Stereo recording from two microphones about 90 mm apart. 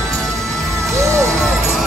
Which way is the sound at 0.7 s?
35° right (ahead or behind).